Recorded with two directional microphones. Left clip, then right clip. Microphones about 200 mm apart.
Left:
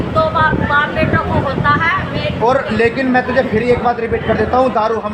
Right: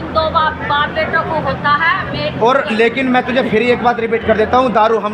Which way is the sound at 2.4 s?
45° right (ahead or behind).